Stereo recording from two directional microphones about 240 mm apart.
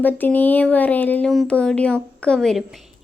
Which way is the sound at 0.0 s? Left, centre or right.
Centre.